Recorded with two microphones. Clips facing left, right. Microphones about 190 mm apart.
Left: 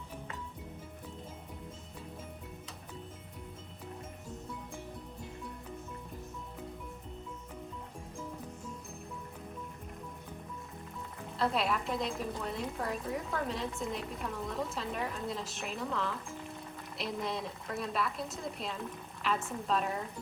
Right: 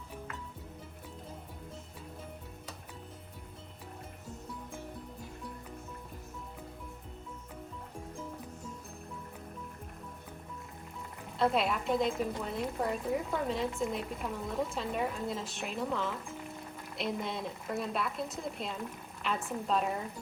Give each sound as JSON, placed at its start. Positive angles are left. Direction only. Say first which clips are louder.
{"t": 11.3, "sound": "a woman's voice", "louder": "right 2 dB", "side_deg": 0}